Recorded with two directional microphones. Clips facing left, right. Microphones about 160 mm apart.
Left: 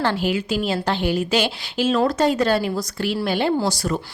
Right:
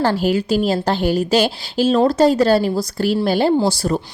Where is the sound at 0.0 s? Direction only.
40° right (ahead or behind).